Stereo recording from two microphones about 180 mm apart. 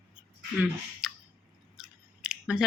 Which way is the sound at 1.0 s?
5° right (ahead or behind).